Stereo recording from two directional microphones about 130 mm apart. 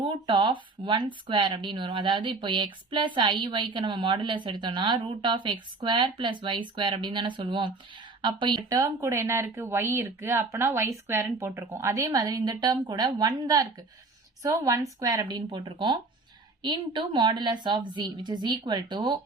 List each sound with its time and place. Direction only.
0.0 s a woman's voice: 40° right (ahead or behind)
8.7 s a woman's voice: 25° right (ahead or behind)